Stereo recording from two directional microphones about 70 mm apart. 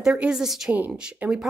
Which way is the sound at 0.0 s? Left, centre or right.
Centre.